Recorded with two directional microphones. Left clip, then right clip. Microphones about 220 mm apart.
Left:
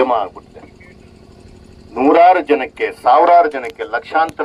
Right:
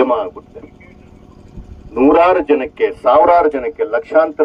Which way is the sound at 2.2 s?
40° right (ahead or behind).